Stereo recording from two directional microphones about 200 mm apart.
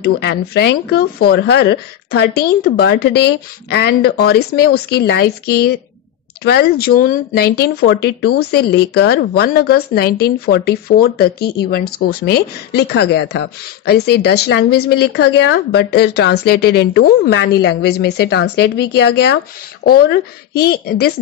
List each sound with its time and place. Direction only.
0.0 s speech: 55° left (ahead or behind)